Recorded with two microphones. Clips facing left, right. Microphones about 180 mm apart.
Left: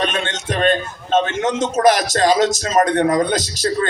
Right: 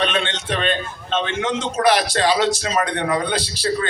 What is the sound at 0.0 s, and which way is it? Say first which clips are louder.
A man's voice: even; 45° left (ahead or behind).